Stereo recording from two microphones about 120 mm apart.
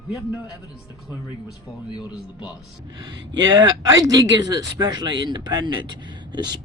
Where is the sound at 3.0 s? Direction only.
40° right (ahead or behind).